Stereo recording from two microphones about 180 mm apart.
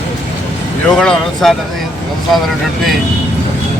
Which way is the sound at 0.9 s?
5° left (ahead or behind).